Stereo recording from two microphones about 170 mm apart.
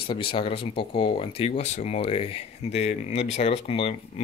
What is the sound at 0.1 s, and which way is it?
Speech, 30° left (ahead or behind).